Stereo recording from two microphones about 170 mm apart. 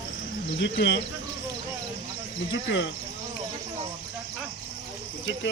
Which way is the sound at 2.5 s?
90° left.